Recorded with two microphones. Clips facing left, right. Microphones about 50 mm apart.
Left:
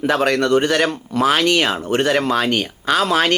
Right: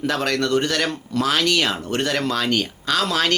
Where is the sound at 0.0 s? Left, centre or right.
Centre.